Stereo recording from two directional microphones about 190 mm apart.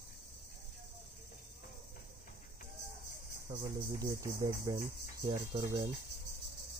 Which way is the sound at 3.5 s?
25° right (ahead or behind).